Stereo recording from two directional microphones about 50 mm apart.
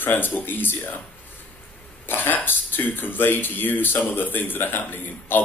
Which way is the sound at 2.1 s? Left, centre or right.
Left.